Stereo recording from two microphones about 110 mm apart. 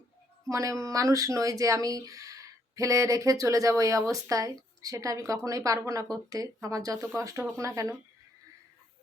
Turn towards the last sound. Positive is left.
turn(degrees=-30)  # may be behind; listen again after turning